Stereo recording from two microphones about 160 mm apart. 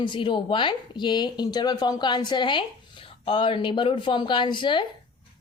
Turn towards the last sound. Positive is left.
turn(degrees=30)  # may be behind; listen again after turning